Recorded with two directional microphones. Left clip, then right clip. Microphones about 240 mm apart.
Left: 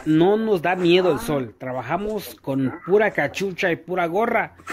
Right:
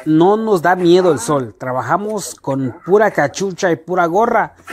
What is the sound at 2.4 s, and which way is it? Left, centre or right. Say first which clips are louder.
Speech: right 4 dB; right.